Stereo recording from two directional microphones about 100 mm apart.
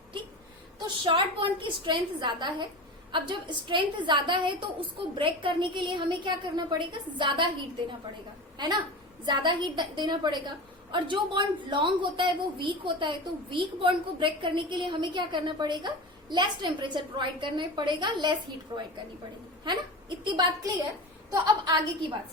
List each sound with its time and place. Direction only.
1.0 s a woman's voice: 60° right (ahead or behind)
8.5 s a woman's voice: 45° right (ahead or behind)